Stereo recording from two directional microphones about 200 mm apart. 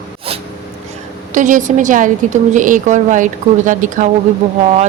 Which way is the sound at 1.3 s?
40° right (ahead or behind).